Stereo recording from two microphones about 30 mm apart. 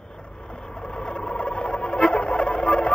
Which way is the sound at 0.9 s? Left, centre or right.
Left.